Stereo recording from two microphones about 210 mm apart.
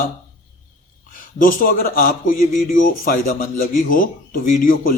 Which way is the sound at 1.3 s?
40° left (ahead or behind).